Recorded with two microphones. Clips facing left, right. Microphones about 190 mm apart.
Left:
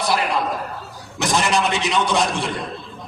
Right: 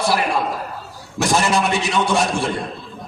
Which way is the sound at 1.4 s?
20° left (ahead or behind).